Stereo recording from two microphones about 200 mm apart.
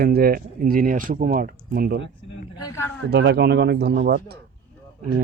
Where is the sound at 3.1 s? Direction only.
55° right (ahead or behind).